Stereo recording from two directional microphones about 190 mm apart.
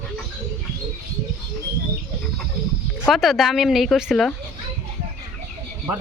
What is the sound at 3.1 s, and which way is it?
Speech, centre (ahead or behind).